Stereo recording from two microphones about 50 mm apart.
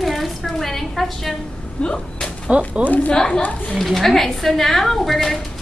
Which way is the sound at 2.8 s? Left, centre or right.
Left.